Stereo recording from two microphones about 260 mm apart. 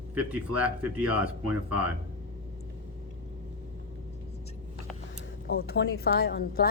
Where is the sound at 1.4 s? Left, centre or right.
Right.